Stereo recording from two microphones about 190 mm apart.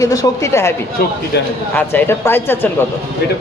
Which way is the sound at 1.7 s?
10° left (ahead or behind).